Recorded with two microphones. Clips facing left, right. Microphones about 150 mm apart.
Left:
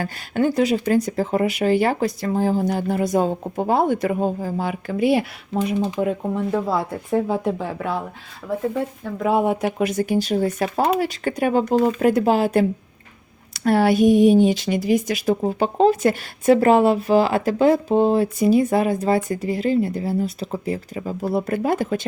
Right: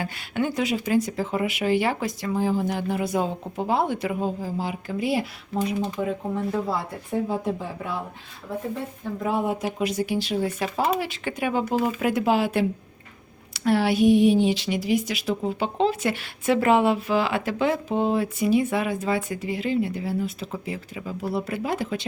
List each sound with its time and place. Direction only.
0.0 s speech: 40° left (ahead or behind); by 6.6 s 65° left (ahead or behind)
7.1 s speech: 85° left
9.2 s speech: 75° left (ahead or behind); by 22.0 s 45° left (ahead or behind)